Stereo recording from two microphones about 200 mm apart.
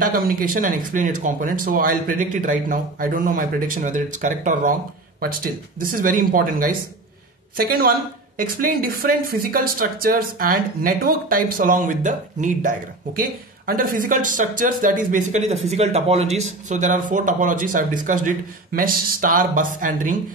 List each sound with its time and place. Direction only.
0.0 s speech: 45° right (ahead or behind)